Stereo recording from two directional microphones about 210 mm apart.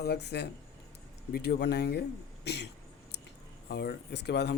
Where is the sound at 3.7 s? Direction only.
50° left (ahead or behind).